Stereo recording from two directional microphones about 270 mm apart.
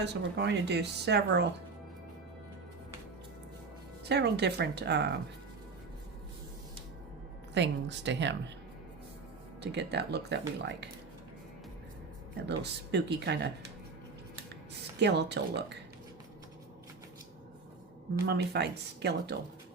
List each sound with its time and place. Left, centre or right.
0.0 s a woman's voice: right
4.1 s a woman's voice: right
7.5 s a woman's voice: right
9.6 s a woman's voice: right
12.5 s a woman's voice: right
14.9 s a woman's voice: right
18.3 s a woman's voice: right